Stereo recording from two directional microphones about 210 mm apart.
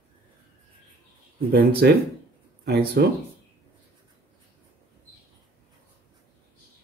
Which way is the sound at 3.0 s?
50° right (ahead or behind).